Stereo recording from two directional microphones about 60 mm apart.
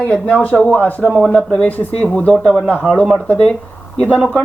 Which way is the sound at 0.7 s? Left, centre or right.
Left.